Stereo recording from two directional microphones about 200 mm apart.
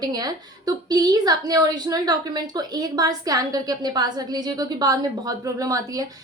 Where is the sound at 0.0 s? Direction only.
20° right (ahead or behind).